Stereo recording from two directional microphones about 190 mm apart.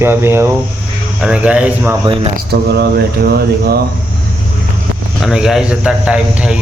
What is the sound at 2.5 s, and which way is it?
Mantra, 60° right (ahead or behind).